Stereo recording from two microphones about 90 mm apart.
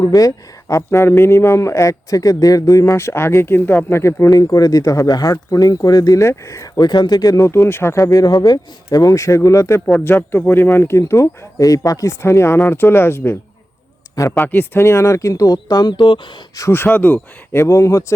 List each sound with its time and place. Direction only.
0.0 s speech: 40° left (ahead or behind)
10.0 s speech: 25° left (ahead or behind)
14.4 s speech: 20° left (ahead or behind); by 16.2 s 60° left (ahead or behind)
16.6 s speech: 30° left (ahead or behind)
17.7 s speech: 35° left (ahead or behind)